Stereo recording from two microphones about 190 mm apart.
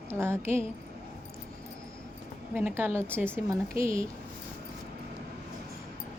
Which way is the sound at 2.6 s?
10° right (ahead or behind).